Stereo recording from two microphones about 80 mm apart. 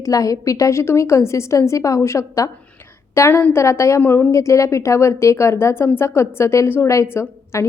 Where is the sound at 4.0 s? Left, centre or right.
Left.